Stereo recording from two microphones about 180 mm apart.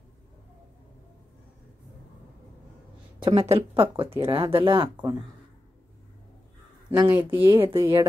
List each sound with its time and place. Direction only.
3.3 s speech: 35° right (ahead or behind)
7.0 s speech: 10° right (ahead or behind)